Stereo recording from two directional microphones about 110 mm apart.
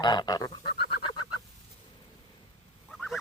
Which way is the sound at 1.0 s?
45° left (ahead or behind).